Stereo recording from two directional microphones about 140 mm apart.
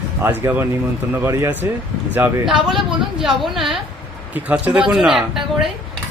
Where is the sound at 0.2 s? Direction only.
15° right (ahead or behind).